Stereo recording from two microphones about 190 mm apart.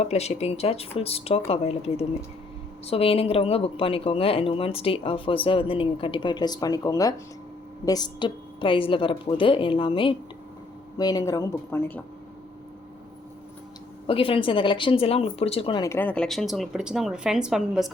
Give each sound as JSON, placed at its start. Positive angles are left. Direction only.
{"t": 0.0, "sound": "speech", "side_deg": 35}
{"t": 14.1, "sound": "speech", "side_deg": 30}